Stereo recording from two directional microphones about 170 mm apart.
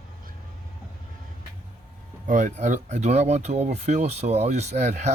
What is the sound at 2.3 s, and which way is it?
Speech, 45° right (ahead or behind).